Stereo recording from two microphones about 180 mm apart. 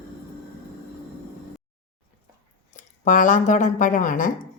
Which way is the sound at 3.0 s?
45° left (ahead or behind).